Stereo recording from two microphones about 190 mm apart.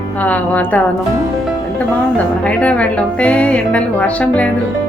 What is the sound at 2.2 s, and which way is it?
Speech, 5° left (ahead or behind).